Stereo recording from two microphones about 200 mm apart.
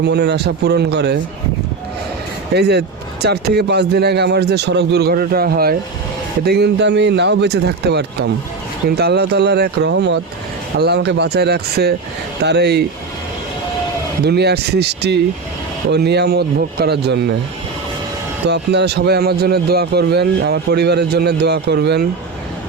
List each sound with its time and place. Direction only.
0.0 s speech: 55° right (ahead or behind)
2.6 s speech: 55° right (ahead or behind)
14.3 s speech: 55° right (ahead or behind)
18.4 s speech: 55° right (ahead or behind)